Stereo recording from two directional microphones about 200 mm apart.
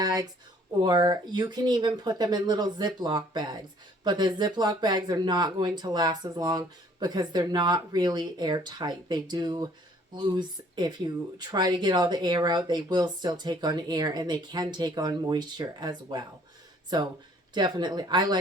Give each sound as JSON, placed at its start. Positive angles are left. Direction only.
{"t": 0.0, "sound": "speech", "side_deg": -20}